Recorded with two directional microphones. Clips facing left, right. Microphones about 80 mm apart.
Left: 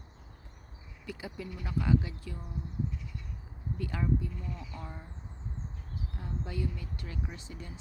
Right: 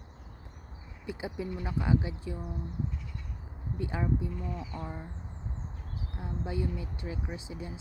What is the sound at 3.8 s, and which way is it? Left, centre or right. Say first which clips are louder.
Speech: right 1 dB; right.